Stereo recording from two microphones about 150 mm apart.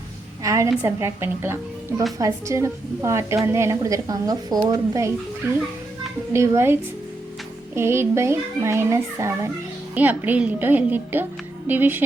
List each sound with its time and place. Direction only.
0.4 s a sound: 20° right (ahead or behind)
0.8 s a child's voice: 15° right (ahead or behind)
7.8 s a child's voice: 15° right (ahead or behind)